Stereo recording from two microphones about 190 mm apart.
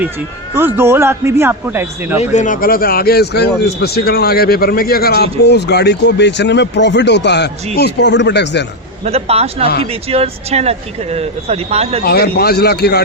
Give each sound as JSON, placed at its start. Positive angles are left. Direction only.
{"t": 0.5, "sound": "a man's voice", "side_deg": -10}
{"t": 2.3, "sound": "a man's voice", "side_deg": 40}
{"t": 9.0, "sound": "speech", "side_deg": -30}
{"t": 12.0, "sound": "a man's voice", "side_deg": 55}